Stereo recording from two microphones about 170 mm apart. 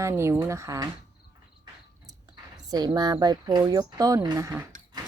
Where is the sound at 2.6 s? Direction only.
25° right (ahead or behind).